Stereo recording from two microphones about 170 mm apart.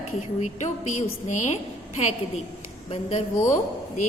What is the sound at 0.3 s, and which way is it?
A woman's voice, 45° left (ahead or behind).